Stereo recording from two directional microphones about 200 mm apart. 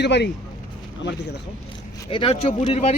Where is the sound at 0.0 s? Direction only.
60° left (ahead or behind).